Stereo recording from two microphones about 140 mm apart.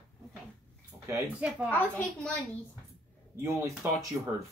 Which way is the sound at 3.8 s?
15° right (ahead or behind).